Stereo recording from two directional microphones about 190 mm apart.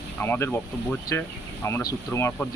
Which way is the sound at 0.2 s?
10° left (ahead or behind).